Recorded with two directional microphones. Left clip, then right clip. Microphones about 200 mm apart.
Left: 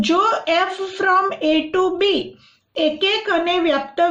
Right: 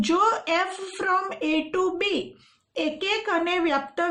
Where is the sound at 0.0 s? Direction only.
45° right (ahead or behind).